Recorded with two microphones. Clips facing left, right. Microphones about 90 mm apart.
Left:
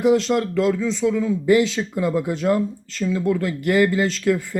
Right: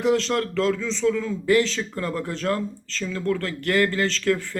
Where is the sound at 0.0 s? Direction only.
5° left (ahead or behind).